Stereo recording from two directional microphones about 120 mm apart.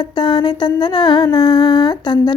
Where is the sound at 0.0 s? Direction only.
35° left (ahead or behind).